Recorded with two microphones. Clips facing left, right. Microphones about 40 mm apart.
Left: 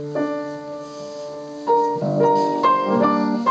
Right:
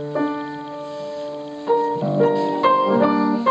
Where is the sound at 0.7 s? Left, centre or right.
Right.